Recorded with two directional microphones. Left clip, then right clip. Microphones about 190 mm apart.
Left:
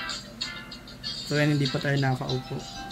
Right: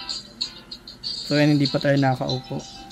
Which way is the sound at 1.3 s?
45° right (ahead or behind).